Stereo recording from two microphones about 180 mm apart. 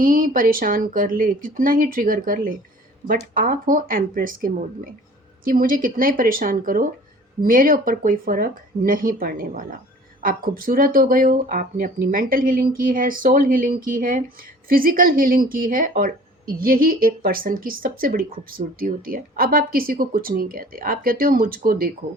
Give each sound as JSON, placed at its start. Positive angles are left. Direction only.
{"t": 0.0, "sound": "speech", "side_deg": -50}